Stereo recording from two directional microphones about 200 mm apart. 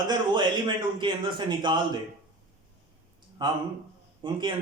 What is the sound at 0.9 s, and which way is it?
Speech, 25° right (ahead or behind).